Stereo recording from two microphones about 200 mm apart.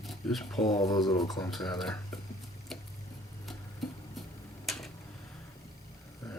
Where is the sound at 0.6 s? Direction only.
20° left (ahead or behind).